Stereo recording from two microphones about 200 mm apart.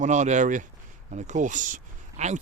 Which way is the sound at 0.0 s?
35° right (ahead or behind).